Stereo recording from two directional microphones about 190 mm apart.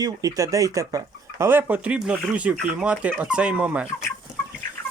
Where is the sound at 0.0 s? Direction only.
20° right (ahead or behind).